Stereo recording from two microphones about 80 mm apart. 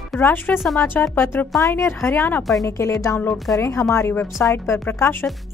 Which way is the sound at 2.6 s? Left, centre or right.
Left.